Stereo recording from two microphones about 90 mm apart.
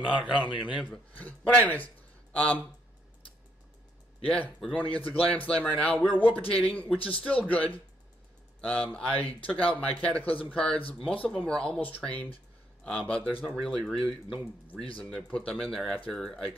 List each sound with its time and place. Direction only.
0.0 s speech: 15° right (ahead or behind)
0.8 s speech: 15° left (ahead or behind)
4.2 s speech: 15° left (ahead or behind)
13.6 s speech: 5° left (ahead or behind)
15.0 s speech: 10° left (ahead or behind)